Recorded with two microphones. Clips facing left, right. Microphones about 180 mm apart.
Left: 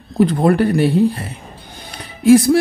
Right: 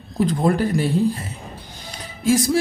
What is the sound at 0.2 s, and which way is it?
Speech, 65° left (ahead or behind).